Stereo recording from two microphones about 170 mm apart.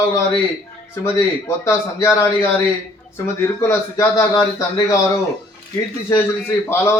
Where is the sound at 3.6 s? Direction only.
15° left (ahead or behind).